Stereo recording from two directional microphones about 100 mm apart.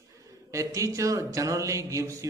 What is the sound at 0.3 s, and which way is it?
A man's voice, 35° right (ahead or behind).